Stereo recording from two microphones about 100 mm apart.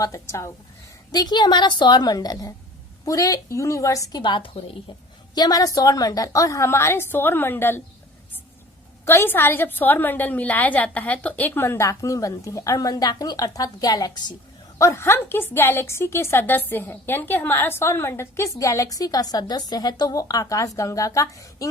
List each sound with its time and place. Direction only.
0.0 s a woman's voice: 30° left (ahead or behind)
1.1 s a woman's voice: 45° left (ahead or behind)
4.2 s a woman's voice: 55° left (ahead or behind)
5.3 s a woman's voice: 40° left (ahead or behind); by 7.8 s 20° left (ahead or behind)
9.0 s a woman's voice: 20° left (ahead or behind); by 14.3 s 40° left (ahead or behind)
14.8 s a woman's voice: 30° left (ahead or behind)